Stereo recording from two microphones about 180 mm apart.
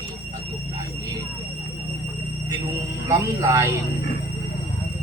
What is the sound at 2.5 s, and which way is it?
Speech, 20° right (ahead or behind).